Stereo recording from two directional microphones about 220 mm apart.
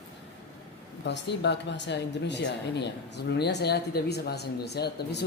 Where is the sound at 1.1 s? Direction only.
50° left (ahead or behind).